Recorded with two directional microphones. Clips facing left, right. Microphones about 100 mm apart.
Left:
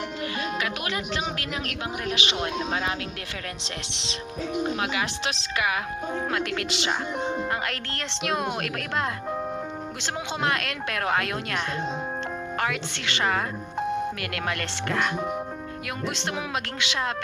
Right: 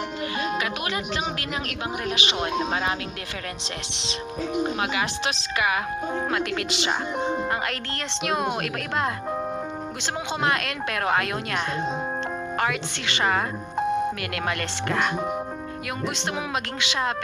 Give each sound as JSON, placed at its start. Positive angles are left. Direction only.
{"t": 0.3, "sound": "music", "side_deg": -25}
{"t": 2.0, "sound": "speech", "side_deg": -25}
{"t": 4.8, "sound": "speech", "side_deg": -15}
{"t": 16.8, "sound": "speech", "side_deg": -20}